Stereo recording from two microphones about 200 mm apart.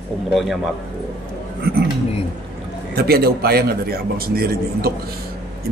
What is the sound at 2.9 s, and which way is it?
A man's voice, 50° right (ahead or behind).